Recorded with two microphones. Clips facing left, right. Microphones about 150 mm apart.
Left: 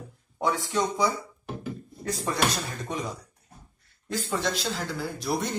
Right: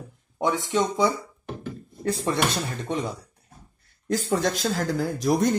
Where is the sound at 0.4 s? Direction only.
20° right (ahead or behind).